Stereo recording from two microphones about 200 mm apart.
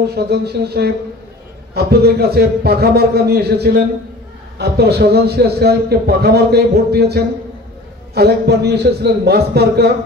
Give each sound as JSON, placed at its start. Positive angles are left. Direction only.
{"t": 0.0, "sound": "a man's voice", "side_deg": -55}